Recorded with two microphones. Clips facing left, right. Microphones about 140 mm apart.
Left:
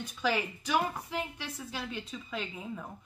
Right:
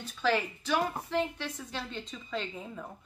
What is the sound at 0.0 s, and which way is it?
A woman's voice, 10° left (ahead or behind).